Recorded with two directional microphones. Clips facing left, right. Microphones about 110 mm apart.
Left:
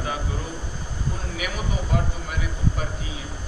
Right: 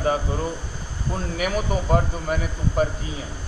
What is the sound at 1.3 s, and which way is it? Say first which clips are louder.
Speech: right 8 dB; 45° right (ahead or behind).